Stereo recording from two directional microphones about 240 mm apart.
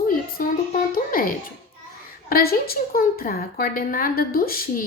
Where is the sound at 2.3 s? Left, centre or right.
Left.